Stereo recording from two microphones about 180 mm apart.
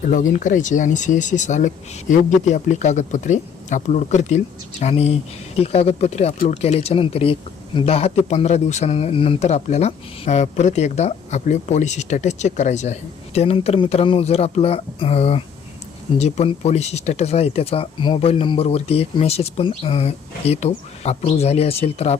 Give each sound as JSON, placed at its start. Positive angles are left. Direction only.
{"t": 0.0, "sound": "speech", "side_deg": 45}